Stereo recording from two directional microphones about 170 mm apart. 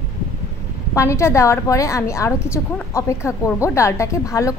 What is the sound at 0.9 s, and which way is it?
A woman's voice, 15° left (ahead or behind).